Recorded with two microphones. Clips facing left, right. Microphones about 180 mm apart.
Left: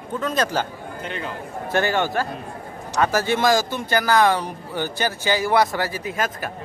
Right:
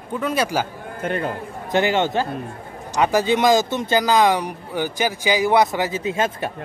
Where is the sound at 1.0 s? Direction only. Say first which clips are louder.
Right 8 dB; 50° right (ahead or behind).